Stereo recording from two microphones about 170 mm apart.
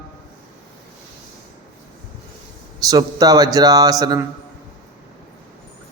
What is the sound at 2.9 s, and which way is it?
A man's voice, 20° right (ahead or behind).